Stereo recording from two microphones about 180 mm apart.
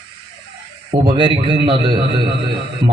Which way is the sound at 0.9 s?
25° right (ahead or behind).